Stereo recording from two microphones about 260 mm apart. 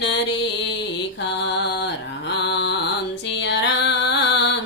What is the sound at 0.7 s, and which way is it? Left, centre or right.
Mantra, left.